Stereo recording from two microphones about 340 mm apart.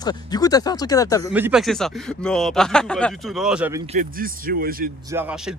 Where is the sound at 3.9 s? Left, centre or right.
Right.